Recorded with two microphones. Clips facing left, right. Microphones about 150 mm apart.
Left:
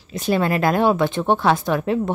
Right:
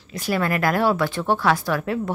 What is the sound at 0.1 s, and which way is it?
A woman's voice, 25° left (ahead or behind).